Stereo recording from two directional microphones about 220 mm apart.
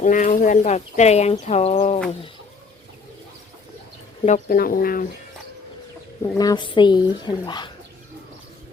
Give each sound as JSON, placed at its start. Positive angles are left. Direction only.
{"t": 0.0, "sound": "speech", "side_deg": 35}
{"t": 4.3, "sound": "speech", "side_deg": 40}
{"t": 6.2, "sound": "speech", "side_deg": 15}